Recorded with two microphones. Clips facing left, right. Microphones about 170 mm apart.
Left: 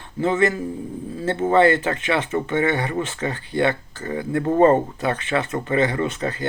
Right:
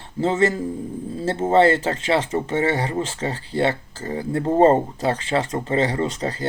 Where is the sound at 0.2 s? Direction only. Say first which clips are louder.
Even; 30° right (ahead or behind).